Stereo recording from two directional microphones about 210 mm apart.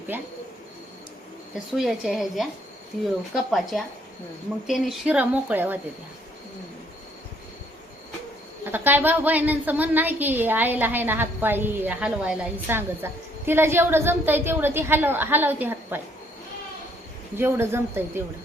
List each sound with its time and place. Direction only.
0.1 s a woman's voice: 10° right (ahead or behind)
1.7 s a woman's voice: centre (ahead or behind)
8.6 s a woman's voice: 10° right (ahead or behind)
17.3 s a woman's voice: 10° right (ahead or behind)